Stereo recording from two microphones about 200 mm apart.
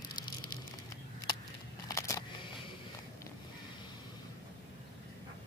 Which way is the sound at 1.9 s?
15° left (ahead or behind).